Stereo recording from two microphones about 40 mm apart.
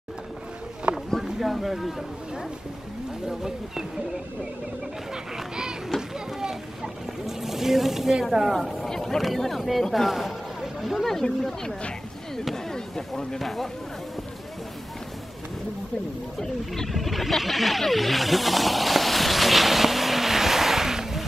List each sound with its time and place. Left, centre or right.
0.9 s a sound: right
1.2 s speech: centre
3.3 s speech: centre
5.1 s a child's voice: centre
8.6 s vehicle: centre
9.4 s speech: centre
12.6 s chop: centre
13.4 s speech: centre
16.3 s wild animals: centre